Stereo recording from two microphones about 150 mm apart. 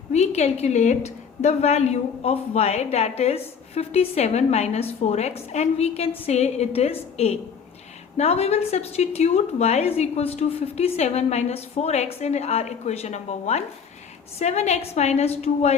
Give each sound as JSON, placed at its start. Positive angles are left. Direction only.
{"t": 0.1, "sound": "a woman's voice", "side_deg": 45}